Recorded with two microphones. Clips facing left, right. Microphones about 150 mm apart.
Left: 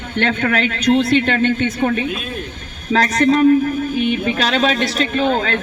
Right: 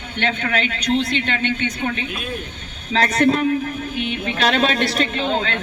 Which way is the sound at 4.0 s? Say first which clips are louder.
Left 2 dB; 50° left (ahead or behind).